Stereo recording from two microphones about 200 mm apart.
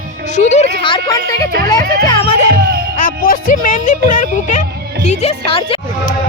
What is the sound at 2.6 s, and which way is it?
Music, 55° right (ahead or behind).